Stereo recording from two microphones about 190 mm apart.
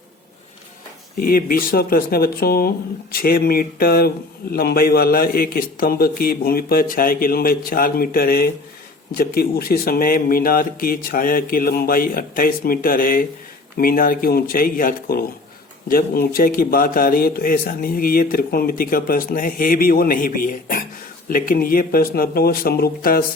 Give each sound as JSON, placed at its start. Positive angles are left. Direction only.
{"t": 1.2, "sound": "a man's voice", "side_deg": 50}